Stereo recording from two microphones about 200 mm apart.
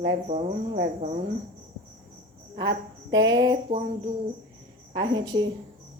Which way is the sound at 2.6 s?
20° right (ahead or behind).